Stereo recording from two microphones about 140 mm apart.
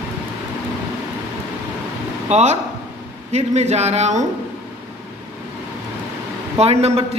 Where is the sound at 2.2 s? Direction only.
55° right (ahead or behind).